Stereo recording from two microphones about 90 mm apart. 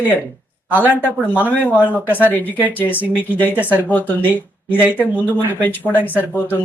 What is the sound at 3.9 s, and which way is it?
Speech, 20° left (ahead or behind).